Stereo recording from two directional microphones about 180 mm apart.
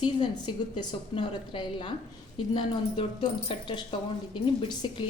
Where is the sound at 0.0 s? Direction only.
25° left (ahead or behind).